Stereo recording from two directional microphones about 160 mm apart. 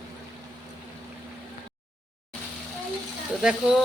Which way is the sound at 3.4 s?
5° right (ahead or behind).